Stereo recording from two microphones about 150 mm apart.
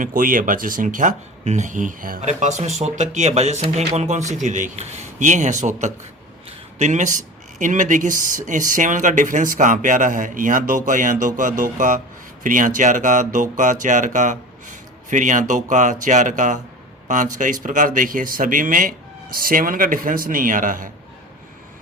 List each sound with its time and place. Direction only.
0.0 s speech: 65° right (ahead or behind)